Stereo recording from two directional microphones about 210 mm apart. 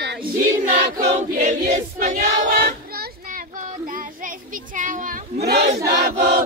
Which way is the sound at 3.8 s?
40° right (ahead or behind).